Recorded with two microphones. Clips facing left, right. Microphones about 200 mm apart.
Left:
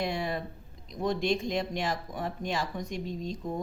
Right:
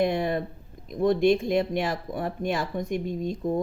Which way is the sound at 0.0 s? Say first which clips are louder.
Right 7 dB; 55° right (ahead or behind).